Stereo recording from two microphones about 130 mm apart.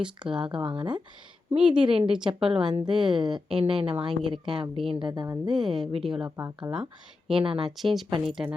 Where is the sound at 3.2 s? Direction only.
35° right (ahead or behind).